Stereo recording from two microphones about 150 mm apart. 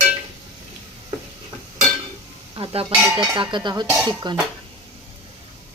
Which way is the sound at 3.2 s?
30° right (ahead or behind).